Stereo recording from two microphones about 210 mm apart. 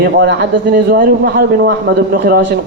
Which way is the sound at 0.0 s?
55° right (ahead or behind).